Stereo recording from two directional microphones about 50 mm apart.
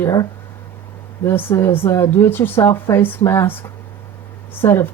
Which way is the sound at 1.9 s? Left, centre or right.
Left.